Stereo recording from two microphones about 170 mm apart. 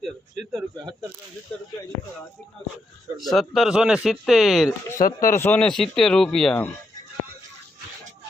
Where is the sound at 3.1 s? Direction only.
Centre (ahead or behind).